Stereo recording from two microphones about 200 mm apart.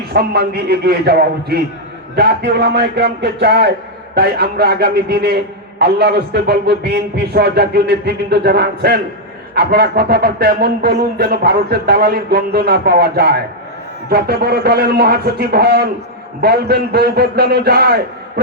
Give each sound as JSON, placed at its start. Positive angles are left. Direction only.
{"t": 0.1, "sound": "a man's voice", "side_deg": -50}